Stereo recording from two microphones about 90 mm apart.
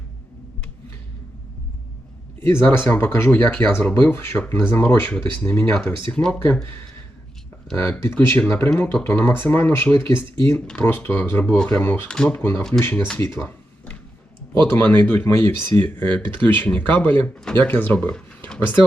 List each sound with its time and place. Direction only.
2.4 s speech: 25° left (ahead or behind)
7.8 s speech: 25° left (ahead or behind)
11.8 s speech: 25° left (ahead or behind)
12.0 s speech: 10° left (ahead or behind)
12.3 s speech: 20° left (ahead or behind)
14.7 s speech: 20° left (ahead or behind)
16.3 s speech: 65° right (ahead or behind)
16.6 s speech: 20° left (ahead or behind)
18.1 s a sound: 10° left (ahead or behind)